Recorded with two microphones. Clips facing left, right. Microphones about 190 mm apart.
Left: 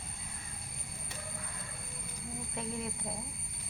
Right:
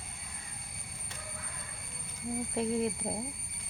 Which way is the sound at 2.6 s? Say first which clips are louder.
Right 8 dB; 35° right (ahead or behind).